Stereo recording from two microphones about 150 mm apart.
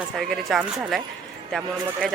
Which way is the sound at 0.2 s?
Centre (ahead or behind).